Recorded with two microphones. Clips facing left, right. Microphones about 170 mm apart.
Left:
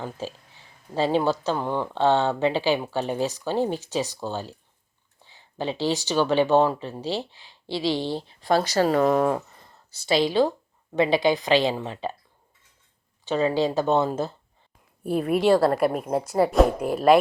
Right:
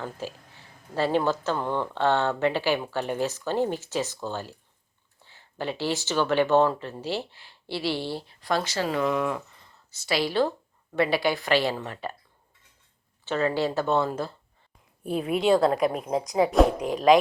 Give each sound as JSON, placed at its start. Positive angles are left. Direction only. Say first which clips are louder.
{"t": 0.9, "sound": "speech", "louder": "left 2 dB", "side_deg": 15}
{"t": 8.4, "sound": "a woman's voice", "louder": "left 6 dB", "side_deg": 35}
{"t": 13.2, "sound": "speech", "louder": "left 3 dB", "side_deg": 15}
{"t": 15.3, "sound": "speech", "louder": "left 2 dB", "side_deg": 0}